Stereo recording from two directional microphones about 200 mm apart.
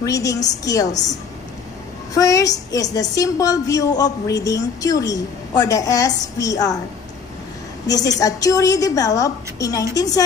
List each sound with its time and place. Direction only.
0.0 s a woman's voice: 15° left (ahead or behind)
2.1 s a woman's voice: 15° left (ahead or behind)
7.8 s a woman's voice: 20° left (ahead or behind)